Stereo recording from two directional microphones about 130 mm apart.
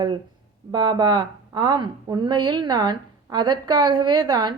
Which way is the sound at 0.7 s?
35° right (ahead or behind).